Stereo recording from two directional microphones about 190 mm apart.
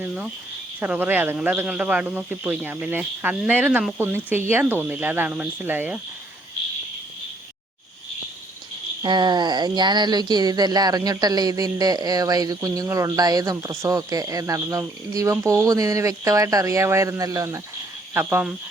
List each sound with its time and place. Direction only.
0.0 s speech: 5° right (ahead or behind)
9.0 s speech: 25° right (ahead or behind)